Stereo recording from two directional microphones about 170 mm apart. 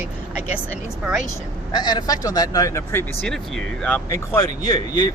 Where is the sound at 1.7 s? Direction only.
25° left (ahead or behind).